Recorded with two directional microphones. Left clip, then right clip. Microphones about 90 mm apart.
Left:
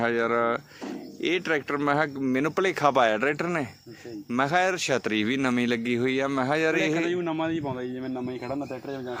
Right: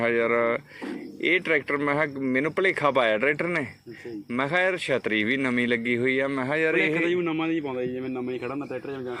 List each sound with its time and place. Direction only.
0.0 s speech: 40° left (ahead or behind)
1.8 s speech: 60° left (ahead or behind)
4.3 s a man's voice: 65° left (ahead or behind); by 6.9 s 85° left
7.3 s a man's voice: 20° left (ahead or behind)